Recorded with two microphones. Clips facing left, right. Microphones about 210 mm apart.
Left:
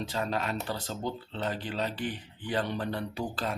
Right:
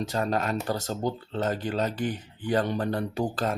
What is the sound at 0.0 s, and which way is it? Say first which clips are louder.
Speech: right 5 dB; 45° right (ahead or behind).